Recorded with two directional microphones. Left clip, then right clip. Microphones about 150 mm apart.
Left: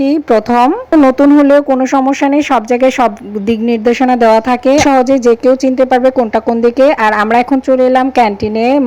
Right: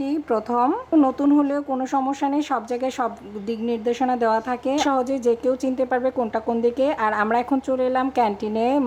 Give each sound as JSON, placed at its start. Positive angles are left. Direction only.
{"t": 0.0, "sound": "a woman's voice", "side_deg": 30}